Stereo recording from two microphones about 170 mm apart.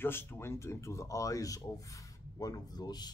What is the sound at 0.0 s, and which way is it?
Speech, 15° left (ahead or behind).